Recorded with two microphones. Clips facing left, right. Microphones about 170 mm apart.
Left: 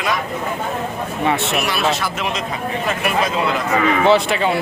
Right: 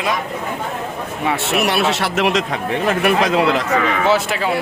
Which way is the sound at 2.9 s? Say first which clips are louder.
Right 5 dB; 65° right (ahead or behind).